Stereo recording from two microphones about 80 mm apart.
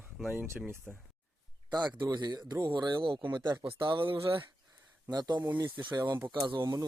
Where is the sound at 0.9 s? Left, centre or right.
Centre.